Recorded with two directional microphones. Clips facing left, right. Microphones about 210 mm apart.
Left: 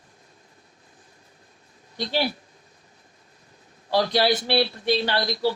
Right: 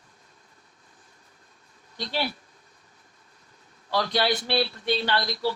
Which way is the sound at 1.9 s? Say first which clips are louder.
Left 4 dB; 35° left (ahead or behind).